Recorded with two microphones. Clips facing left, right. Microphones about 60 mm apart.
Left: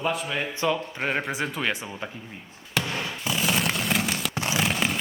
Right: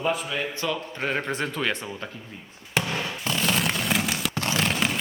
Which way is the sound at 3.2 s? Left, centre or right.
Centre.